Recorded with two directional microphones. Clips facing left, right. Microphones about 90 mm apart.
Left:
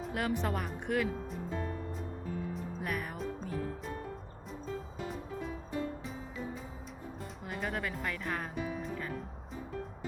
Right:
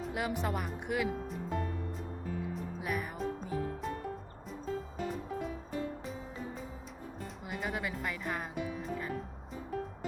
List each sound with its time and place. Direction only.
0.0 s speech: 5° right (ahead or behind)
2.8 s speech: 5° right (ahead or behind)
7.4 s speech: 5° right (ahead or behind)